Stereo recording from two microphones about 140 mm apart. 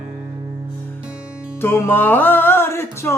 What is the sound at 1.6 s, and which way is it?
Music, 15° left (ahead or behind).